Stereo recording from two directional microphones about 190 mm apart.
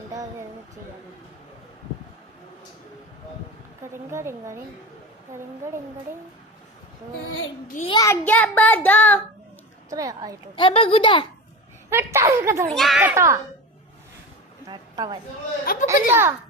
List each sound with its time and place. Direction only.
0.1 s a sound: 20° right (ahead or behind)
3.9 s a woman's voice: 15° right (ahead or behind)
7.9 s child singing: 20° left (ahead or behind)
9.9 s speech: 20° right (ahead or behind)
10.5 s speech: 30° left (ahead or behind)
11.9 s a woman's voice: 15° right (ahead or behind)
12.7 s a woman's voice: centre (ahead or behind)
14.7 s a woman's voice: 20° right (ahead or behind)
15.6 s a child's voice: 50° left (ahead or behind)
15.9 s a woman's voice: 10° right (ahead or behind)